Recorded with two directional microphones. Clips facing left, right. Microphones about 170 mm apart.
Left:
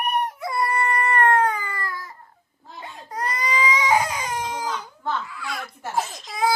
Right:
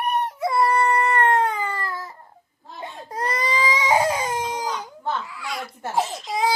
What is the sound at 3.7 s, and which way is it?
Crying, 25° right (ahead or behind).